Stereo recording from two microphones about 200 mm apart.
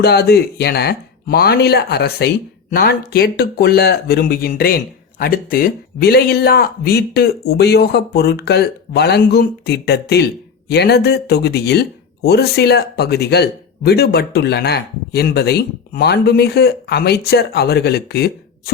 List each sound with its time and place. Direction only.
0.0 s speech: 55° left (ahead or behind)